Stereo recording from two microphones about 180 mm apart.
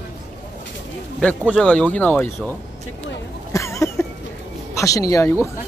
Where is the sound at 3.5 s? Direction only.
15° left (ahead or behind).